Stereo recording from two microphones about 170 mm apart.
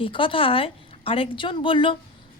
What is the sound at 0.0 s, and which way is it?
A woman's voice, 30° left (ahead or behind).